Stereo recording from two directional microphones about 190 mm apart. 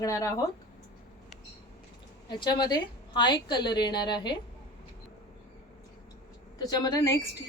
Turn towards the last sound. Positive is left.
turn(degrees=20)  # may be behind; listen again after turning